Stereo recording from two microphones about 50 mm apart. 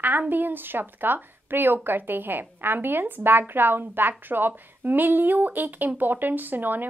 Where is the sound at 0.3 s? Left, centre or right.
Right.